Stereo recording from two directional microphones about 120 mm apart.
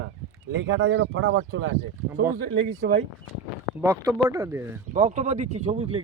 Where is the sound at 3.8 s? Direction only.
25° right (ahead or behind).